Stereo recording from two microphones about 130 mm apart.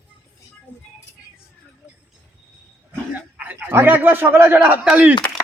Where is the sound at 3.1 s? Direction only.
10° right (ahead or behind).